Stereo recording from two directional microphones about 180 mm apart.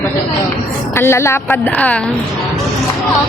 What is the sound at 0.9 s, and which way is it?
A woman's voice, 15° left (ahead or behind).